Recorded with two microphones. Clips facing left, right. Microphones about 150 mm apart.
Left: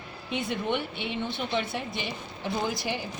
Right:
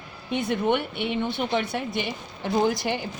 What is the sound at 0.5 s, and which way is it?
A woman's voice, 60° right (ahead or behind).